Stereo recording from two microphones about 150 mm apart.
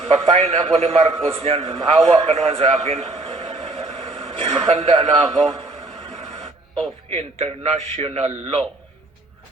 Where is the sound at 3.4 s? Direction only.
30° right (ahead or behind).